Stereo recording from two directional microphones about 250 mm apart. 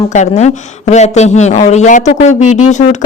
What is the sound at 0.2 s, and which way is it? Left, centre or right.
Speech, left.